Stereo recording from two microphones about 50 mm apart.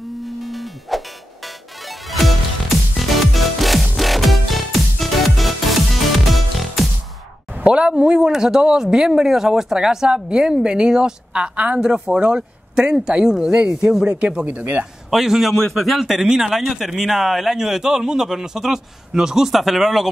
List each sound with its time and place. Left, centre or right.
0.2 s music: centre
7.5 s speech: right
15.0 s a man's voice: centre